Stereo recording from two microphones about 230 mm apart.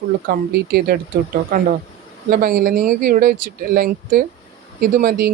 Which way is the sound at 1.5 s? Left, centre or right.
Right.